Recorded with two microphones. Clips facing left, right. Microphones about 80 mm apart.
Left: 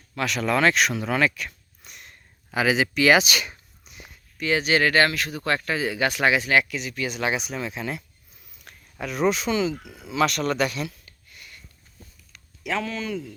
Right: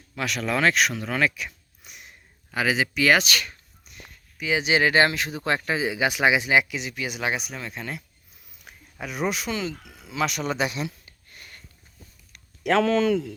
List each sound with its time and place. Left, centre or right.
0.2 s speech: centre
2.5 s speech: centre
3.2 s speech: centre
3.8 s a sound: centre
4.4 s speech: centre
7.3 s speech: centre; by 11.1 s right
11.3 s sniff: right
12.6 s speech: right